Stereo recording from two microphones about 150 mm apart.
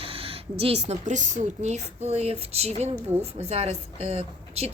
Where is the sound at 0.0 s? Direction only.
40° right (ahead or behind).